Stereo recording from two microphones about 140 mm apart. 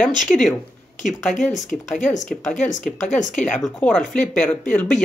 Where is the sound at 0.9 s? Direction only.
60° left (ahead or behind).